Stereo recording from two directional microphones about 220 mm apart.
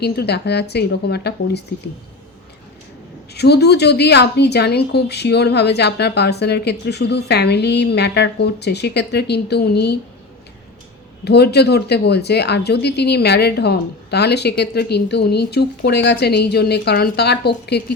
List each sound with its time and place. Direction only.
0.0 s a woman's voice: 50° left (ahead or behind)
3.3 s a woman's voice: 50° left (ahead or behind)
11.3 s a woman's voice: 50° left (ahead or behind)